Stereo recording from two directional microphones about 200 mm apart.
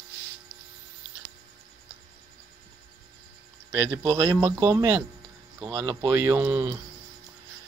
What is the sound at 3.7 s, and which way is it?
Speech, 25° right (ahead or behind).